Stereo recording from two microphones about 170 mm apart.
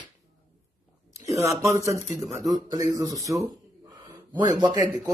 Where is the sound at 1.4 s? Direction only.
15° right (ahead or behind).